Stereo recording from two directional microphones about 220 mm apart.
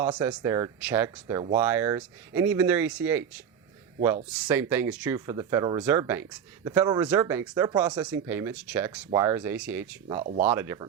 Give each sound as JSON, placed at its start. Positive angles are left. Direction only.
{"t": 0.0, "sound": "speech", "side_deg": -20}
{"t": 4.3, "sound": "speech", "side_deg": -5}